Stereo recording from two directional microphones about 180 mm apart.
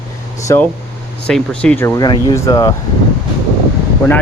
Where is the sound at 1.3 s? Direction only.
5° left (ahead or behind).